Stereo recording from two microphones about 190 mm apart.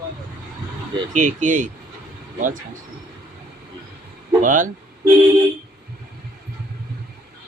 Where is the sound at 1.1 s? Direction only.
40° right (ahead or behind).